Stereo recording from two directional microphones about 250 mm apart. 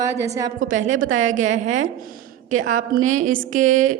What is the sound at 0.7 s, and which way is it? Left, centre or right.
Speech, right.